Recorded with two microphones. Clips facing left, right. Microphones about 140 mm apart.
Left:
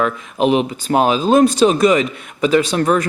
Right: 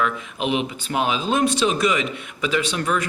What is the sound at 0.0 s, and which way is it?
Speech, 40° left (ahead or behind).